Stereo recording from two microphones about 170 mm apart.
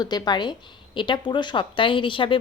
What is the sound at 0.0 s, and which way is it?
A woman's voice, 25° left (ahead or behind).